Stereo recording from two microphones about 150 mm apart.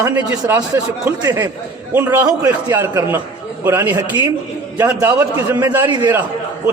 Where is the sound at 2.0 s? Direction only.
15° right (ahead or behind).